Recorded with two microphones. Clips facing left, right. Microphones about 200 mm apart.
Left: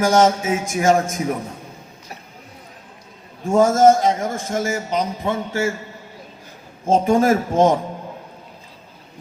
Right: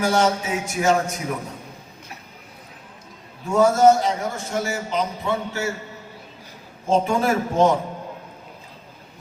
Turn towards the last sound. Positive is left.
turn(degrees=45)  # may be behind; listen again after turning